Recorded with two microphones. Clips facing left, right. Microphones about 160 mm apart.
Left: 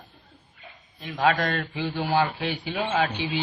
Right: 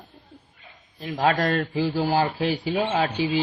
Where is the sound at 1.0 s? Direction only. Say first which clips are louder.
Right 1 dB; 35° right (ahead or behind).